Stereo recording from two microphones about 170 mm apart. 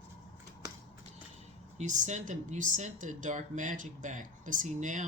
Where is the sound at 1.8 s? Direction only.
45° right (ahead or behind).